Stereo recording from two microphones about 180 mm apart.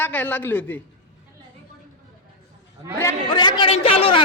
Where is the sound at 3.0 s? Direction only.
25° left (ahead or behind).